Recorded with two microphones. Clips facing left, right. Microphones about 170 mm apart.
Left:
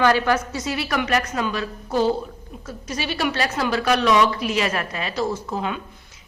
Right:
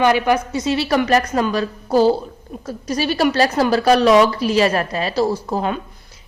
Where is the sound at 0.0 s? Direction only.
15° right (ahead or behind).